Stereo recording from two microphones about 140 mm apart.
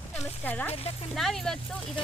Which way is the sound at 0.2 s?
15° left (ahead or behind).